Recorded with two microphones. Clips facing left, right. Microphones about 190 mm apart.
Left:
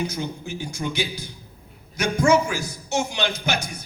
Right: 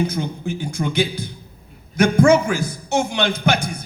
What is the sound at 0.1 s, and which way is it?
Speech, 55° right (ahead or behind).